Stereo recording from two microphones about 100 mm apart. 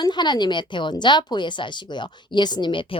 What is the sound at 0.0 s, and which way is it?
Speech, 50° left (ahead or behind).